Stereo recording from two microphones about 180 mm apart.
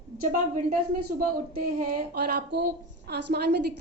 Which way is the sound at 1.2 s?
50° right (ahead or behind).